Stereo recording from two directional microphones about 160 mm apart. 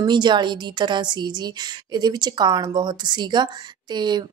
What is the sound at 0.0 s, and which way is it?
A woman's voice, 30° right (ahead or behind).